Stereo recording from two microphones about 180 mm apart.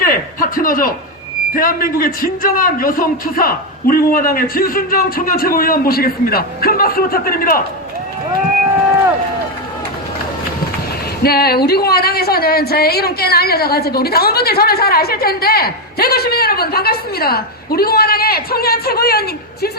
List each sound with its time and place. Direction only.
0.0 s a sound: 50° left (ahead or behind)
1.5 s a man's voice: 50° left (ahead or behind)
11.2 s a woman's voice: 60° left (ahead or behind)